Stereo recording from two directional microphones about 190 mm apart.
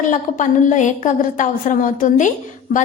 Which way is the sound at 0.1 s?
40° left (ahead or behind).